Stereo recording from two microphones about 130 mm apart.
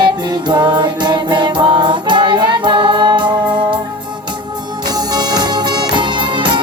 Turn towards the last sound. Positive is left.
turn(degrees=-40)  # may be behind; listen again after turning